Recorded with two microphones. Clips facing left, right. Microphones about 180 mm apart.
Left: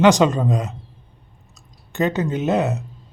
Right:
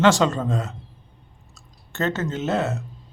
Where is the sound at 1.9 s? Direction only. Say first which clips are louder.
Left 4 dB; 15° left (ahead or behind).